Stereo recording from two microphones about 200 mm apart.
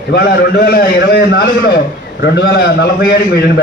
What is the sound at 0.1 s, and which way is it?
A man's voice, 50° left (ahead or behind).